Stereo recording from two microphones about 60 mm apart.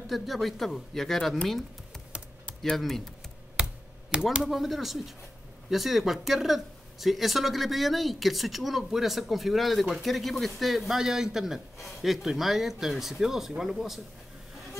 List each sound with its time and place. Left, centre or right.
0.0 s speech: centre
4.1 s speech: centre
4.4 s speech: centre